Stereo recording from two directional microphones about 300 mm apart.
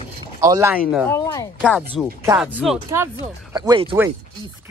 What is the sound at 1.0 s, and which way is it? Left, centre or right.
A man's voice, centre.